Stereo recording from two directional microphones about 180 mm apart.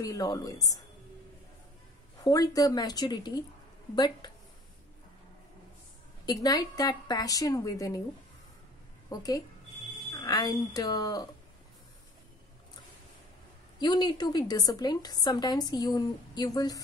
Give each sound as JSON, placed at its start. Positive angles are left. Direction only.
{"t": 0.0, "sound": "a woman's voice", "side_deg": 20}
{"t": 2.2, "sound": "a woman's voice", "side_deg": 20}
{"t": 6.2, "sound": "a woman's voice", "side_deg": 20}
{"t": 9.1, "sound": "a woman's voice", "side_deg": 20}
{"t": 10.1, "sound": "a sound", "side_deg": 20}
{"t": 10.7, "sound": "a woman's voice", "side_deg": 20}
{"t": 13.7, "sound": "a woman's voice", "side_deg": 25}